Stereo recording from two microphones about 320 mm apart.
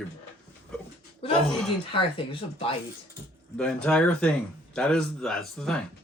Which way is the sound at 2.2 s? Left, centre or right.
Centre.